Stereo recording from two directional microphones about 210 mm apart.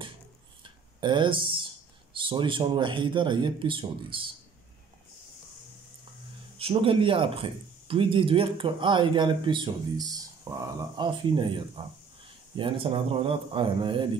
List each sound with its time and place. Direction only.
1.0 s speech: 20° right (ahead or behind)
6.6 s speech: 25° right (ahead or behind)